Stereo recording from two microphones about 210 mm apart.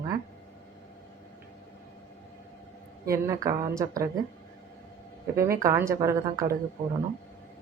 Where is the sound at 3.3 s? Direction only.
15° right (ahead or behind).